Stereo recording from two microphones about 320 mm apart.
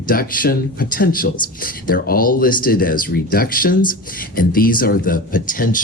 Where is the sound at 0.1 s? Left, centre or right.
Left.